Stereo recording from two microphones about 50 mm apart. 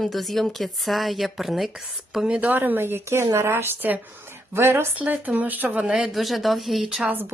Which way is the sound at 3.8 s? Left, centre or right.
Right.